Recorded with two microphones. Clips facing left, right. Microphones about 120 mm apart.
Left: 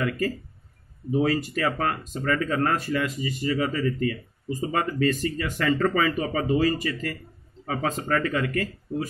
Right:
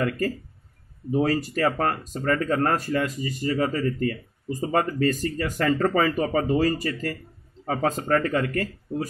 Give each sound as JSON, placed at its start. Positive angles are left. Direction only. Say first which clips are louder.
{"t": 1.1, "sound": "speech", "louder": "right 1 dB", "side_deg": -40}